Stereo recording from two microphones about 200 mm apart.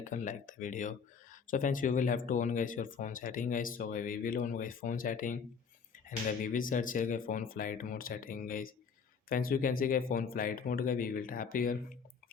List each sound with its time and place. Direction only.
0.0 s speech: 40° left (ahead or behind)